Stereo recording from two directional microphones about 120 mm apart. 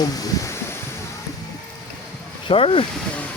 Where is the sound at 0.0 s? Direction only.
30° left (ahead or behind).